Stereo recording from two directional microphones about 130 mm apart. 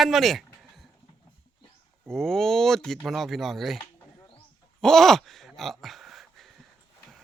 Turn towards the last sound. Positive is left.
turn(degrees=0)  # may be behind; listen again after turning